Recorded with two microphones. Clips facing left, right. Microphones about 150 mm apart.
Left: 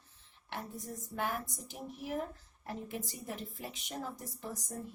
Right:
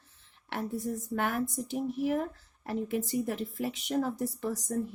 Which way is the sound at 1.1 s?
85° right.